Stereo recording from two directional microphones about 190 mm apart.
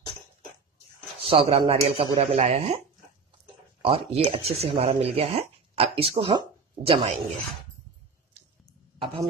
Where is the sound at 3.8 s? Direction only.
30° right (ahead or behind).